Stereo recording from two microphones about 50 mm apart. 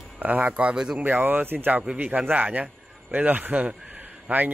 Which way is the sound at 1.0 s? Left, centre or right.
Right.